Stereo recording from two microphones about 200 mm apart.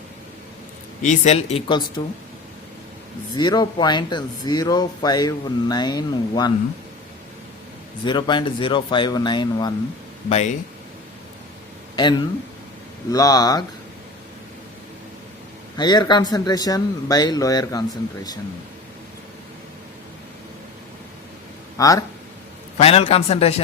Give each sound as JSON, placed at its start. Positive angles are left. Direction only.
{"t": 1.0, "sound": "speech", "side_deg": 35}
{"t": 3.3, "sound": "speech", "side_deg": 20}
{"t": 8.0, "sound": "speech", "side_deg": 25}
{"t": 10.2, "sound": "speech", "side_deg": 35}
{"t": 11.9, "sound": "speech", "side_deg": 20}
{"t": 15.8, "sound": "speech", "side_deg": 20}
{"t": 21.8, "sound": "speech", "side_deg": 15}
{"t": 22.8, "sound": "speech", "side_deg": 30}